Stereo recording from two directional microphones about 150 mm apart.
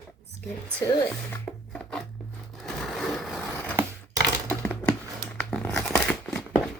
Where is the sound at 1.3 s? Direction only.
10° left (ahead or behind).